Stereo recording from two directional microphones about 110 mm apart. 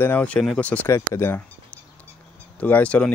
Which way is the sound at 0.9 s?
25° left (ahead or behind).